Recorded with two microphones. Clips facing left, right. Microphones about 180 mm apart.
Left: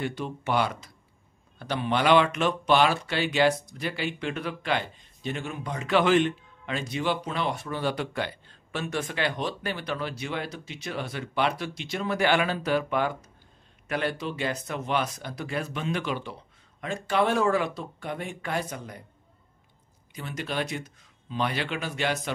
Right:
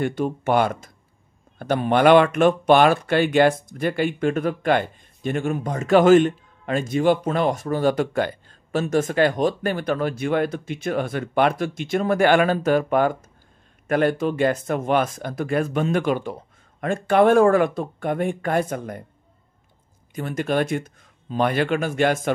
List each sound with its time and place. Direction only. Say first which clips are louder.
0.0 s speech: right 8 dB; 50° right (ahead or behind)
20.2 s speech: right 9 dB; 50° right (ahead or behind)